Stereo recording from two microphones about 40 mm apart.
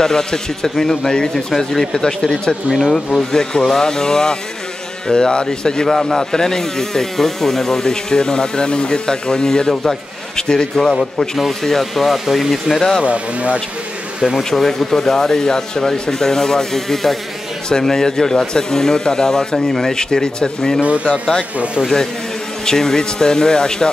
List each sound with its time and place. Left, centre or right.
0.0 s speech: centre
5.9 s speech: centre
13.0 s speech: right
14.3 s speech: centre
20.8 s speech: right
21.1 s speech: centre
22.7 s speech: centre